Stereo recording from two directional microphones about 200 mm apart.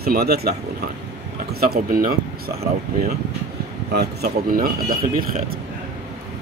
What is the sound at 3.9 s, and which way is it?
Speech, 55° right (ahead or behind).